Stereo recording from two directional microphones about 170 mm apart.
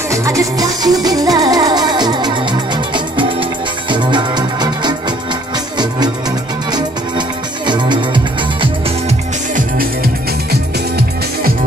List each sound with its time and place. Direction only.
0.1 s music: 20° right (ahead or behind)
6.7 s music: 25° right (ahead or behind)
10.5 s music: 70° right (ahead or behind)